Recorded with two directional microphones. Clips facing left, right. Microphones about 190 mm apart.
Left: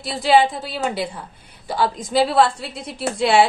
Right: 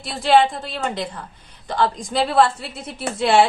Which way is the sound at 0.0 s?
Centre (ahead or behind).